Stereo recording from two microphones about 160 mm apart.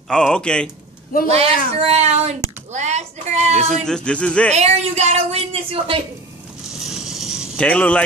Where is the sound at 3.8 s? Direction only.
5° left (ahead or behind).